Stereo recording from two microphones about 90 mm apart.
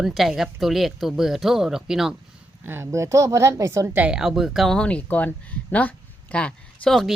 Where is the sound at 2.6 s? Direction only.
25° right (ahead or behind).